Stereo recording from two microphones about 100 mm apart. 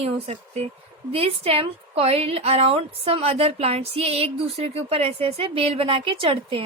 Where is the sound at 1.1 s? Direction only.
75° right (ahead or behind).